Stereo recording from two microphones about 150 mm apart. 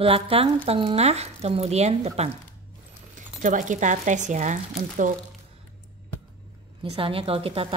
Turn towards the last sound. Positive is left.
turn(degrees=-40)  # may be behind; listen again after turning